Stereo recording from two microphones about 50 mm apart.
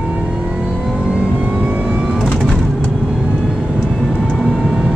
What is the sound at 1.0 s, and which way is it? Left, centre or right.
Vehicle, centre.